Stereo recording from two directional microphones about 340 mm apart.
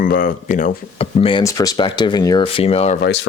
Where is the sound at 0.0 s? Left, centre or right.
Left.